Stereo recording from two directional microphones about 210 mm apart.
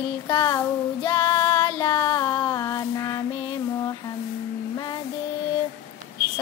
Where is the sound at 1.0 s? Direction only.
20° left (ahead or behind).